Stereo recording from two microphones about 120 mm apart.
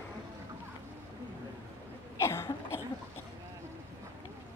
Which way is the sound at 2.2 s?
20° left (ahead or behind).